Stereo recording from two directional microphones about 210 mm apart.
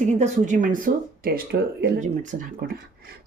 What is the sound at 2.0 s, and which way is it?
Speech, 35° right (ahead or behind).